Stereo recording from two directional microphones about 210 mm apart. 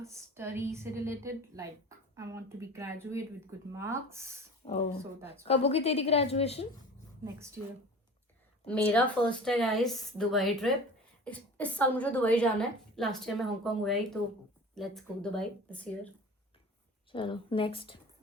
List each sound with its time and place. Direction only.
0.0 s a woman's voice: 15° right (ahead or behind)
4.6 s a woman's voice: 25° left (ahead or behind)
8.6 s a woman's voice: 5° left (ahead or behind)
17.1 s a woman's voice: 25° left (ahead or behind)